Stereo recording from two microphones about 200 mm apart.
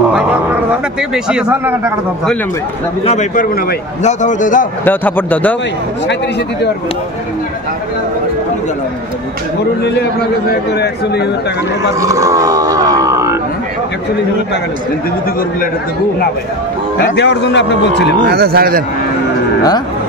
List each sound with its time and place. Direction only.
1.1 s speech: 5° right (ahead or behind)
3.1 s a man's voice: 40° left (ahead or behind)
4.8 s speech: 10° left (ahead or behind)
10.5 s speech: 55° left (ahead or behind)
12.0 s wild animals: 15° right (ahead or behind)
17.0 s speech: 60° left (ahead or behind)
18.2 s speech: 50° right (ahead or behind)